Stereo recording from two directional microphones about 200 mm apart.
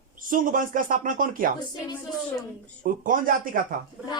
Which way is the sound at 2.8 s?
45° right (ahead or behind).